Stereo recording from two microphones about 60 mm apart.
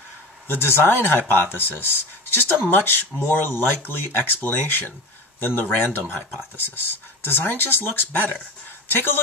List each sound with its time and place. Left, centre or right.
0.5 s speech: left